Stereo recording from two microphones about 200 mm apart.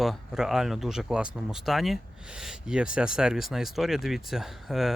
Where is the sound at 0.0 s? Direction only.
Centre (ahead or behind).